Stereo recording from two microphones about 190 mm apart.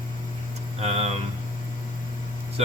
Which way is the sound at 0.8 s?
30° right (ahead or behind).